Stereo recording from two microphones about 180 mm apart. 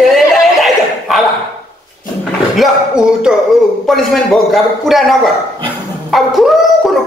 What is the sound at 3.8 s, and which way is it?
A man's voice, centre (ahead or behind).